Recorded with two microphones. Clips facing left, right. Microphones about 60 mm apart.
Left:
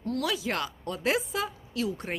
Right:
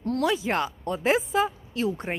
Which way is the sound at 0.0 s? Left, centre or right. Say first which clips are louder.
Right 5 dB; right.